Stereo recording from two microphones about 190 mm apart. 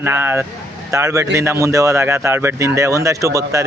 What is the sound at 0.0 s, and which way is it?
Speech, 10° right (ahead or behind).